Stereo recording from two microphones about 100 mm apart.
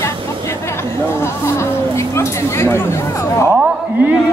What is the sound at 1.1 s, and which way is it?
Music, 25° left (ahead or behind).